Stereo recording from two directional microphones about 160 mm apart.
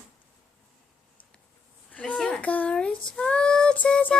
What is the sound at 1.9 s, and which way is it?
Speech, 5° left (ahead or behind).